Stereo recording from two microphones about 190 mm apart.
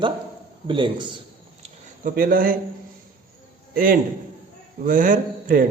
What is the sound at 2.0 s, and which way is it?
Speech, 50° right (ahead or behind).